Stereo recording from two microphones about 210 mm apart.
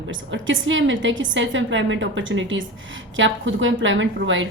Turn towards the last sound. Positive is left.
turn(degrees=-65)  # may be behind; listen again after turning